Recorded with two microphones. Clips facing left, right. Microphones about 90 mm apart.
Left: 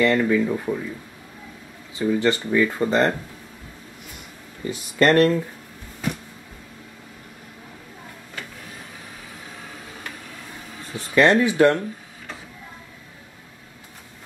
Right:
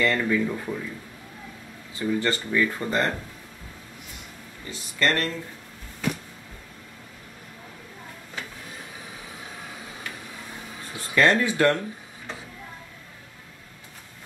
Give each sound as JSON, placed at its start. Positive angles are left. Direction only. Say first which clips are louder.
{"t": 0.0, "sound": "speech", "louder": "left 5 dB", "side_deg": 15}
{"t": 2.0, "sound": "speech", "louder": "left 5 dB", "side_deg": 20}
{"t": 4.6, "sound": "speech", "louder": "left 7 dB", "side_deg": 55}
{"t": 11.0, "sound": "speech", "louder": "left 4 dB", "side_deg": 20}